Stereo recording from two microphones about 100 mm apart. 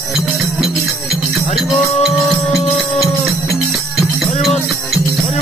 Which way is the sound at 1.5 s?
Centre (ahead or behind).